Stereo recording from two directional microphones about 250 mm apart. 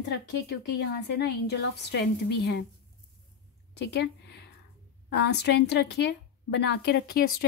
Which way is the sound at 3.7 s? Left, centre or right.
Left.